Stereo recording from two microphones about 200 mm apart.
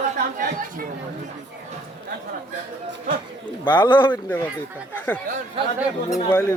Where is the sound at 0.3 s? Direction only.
45° right (ahead or behind).